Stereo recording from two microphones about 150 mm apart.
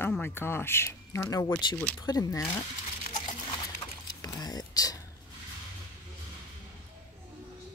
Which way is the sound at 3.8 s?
25° left (ahead or behind).